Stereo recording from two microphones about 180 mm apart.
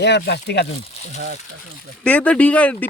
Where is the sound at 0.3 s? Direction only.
65° left (ahead or behind).